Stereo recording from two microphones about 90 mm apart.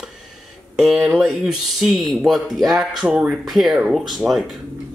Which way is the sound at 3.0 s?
15° right (ahead or behind).